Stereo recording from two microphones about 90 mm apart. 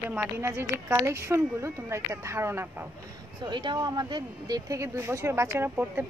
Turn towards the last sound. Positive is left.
turn(degrees=-25)  # may be behind; listen again after turning